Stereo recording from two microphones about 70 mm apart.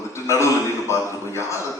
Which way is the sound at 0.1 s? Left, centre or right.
Left.